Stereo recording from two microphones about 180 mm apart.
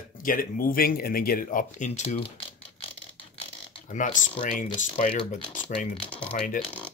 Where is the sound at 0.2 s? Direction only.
50° left (ahead or behind); by 3.8 s 30° left (ahead or behind).